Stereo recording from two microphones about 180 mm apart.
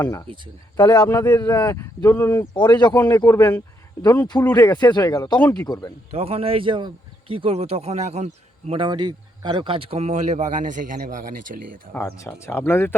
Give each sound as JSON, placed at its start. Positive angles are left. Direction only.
{"t": 0.0, "sound": "speech", "side_deg": 20}
{"t": 2.6, "sound": "speech", "side_deg": 25}
{"t": 4.7, "sound": "speech", "side_deg": 25}
{"t": 6.1, "sound": "speech", "side_deg": -35}
{"t": 11.9, "sound": "speech", "side_deg": 15}